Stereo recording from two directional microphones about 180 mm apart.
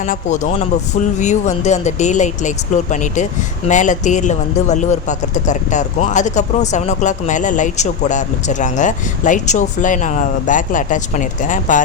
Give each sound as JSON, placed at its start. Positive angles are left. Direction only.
{"t": 0.0, "sound": "speech", "side_deg": 45}